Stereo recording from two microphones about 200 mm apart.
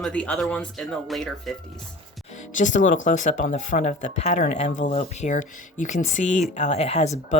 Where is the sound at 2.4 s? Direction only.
40° left (ahead or behind).